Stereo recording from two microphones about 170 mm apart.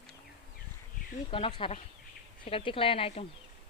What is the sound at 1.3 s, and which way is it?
Speech, 30° left (ahead or behind).